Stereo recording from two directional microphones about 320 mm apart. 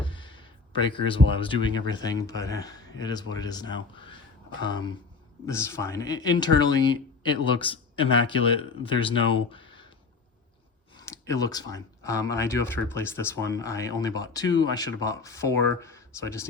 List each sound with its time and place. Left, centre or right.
0.0 s speech: centre
10.9 s speech: centre